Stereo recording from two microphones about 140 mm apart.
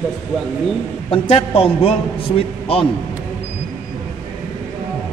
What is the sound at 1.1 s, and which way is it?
Speech, 45° left (ahead or behind).